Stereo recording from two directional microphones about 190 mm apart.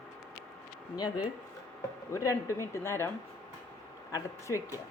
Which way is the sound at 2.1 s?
15° left (ahead or behind).